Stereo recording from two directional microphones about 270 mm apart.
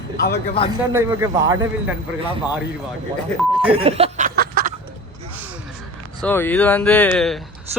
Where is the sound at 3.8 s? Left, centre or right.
Right.